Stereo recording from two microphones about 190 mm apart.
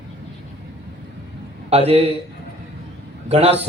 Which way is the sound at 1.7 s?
30° right (ahead or behind).